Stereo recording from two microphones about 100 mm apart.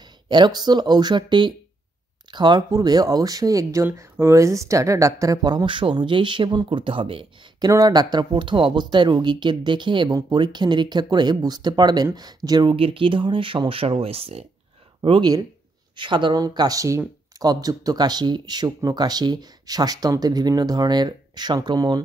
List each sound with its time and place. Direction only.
0.3 s speech: 45° right (ahead or behind)
6.8 s speech: 60° right (ahead or behind)
7.6 s speech: 40° right (ahead or behind)
12.7 s speech: 65° right (ahead or behind); by 14.4 s 80° right
15.0 s speech: 55° right (ahead or behind)